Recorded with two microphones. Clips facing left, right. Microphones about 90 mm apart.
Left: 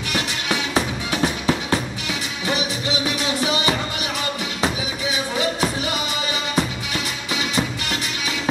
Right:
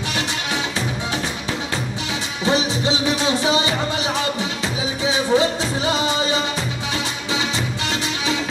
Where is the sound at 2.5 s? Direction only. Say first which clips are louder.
Right 5 dB; 30° right (ahead or behind).